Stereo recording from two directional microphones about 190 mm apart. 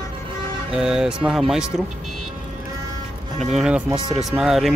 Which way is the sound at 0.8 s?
5° right (ahead or behind).